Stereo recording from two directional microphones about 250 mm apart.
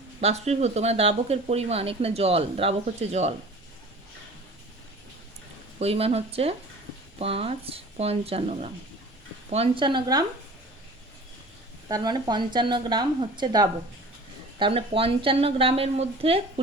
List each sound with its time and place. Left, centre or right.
0.2 s speech: right
5.8 s speech: right
11.9 s speech: centre